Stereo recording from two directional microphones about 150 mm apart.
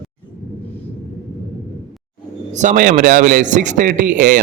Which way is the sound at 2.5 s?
60° right (ahead or behind).